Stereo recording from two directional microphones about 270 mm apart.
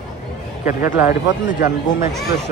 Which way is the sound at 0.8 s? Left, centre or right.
Left.